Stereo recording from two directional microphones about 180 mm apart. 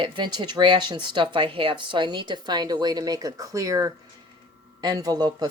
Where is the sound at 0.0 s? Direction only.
25° right (ahead or behind).